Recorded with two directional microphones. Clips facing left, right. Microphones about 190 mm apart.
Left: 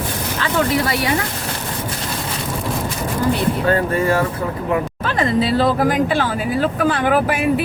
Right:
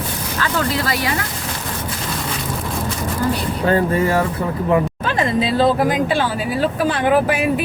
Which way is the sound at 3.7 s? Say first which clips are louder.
Right 4 dB; 25° right (ahead or behind).